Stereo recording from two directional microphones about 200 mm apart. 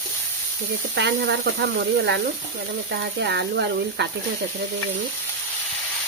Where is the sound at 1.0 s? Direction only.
60° right (ahead or behind).